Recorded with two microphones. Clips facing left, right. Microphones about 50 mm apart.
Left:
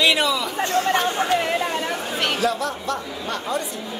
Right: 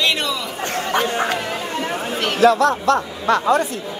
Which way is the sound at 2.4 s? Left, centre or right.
Right.